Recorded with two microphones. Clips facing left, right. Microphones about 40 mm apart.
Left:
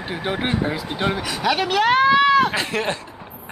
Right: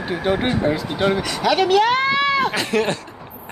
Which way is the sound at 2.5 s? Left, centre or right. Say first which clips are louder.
Right 3 dB; centre.